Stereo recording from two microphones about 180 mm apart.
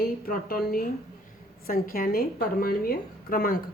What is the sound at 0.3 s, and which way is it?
Speech, 55° left (ahead or behind).